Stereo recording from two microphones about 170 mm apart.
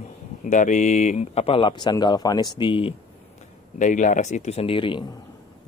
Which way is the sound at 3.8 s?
45° left (ahead or behind).